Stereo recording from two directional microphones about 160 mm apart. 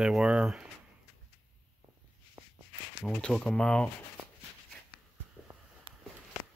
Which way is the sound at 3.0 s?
5° left (ahead or behind).